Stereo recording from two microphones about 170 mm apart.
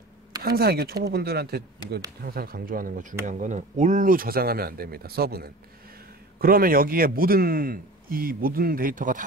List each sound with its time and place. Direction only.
0.4 s a man's voice: 65° right (ahead or behind)